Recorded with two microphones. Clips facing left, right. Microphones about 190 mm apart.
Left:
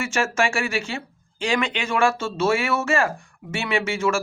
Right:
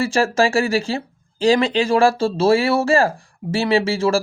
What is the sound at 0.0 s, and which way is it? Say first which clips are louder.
Speech: right 6 dB; 35° right (ahead or behind).